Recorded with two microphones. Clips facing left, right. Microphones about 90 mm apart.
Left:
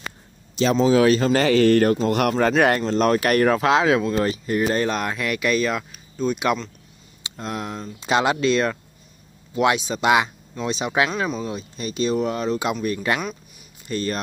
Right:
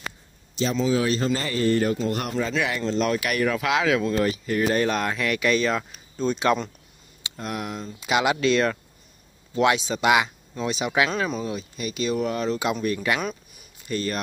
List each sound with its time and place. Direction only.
0.6 s speech: 80° left
2.3 s speech: 55° left (ahead or behind); by 5.6 s 15° left (ahead or behind)
5.6 s speech: 5° left (ahead or behind)
7.2 s speech: 25° left (ahead or behind)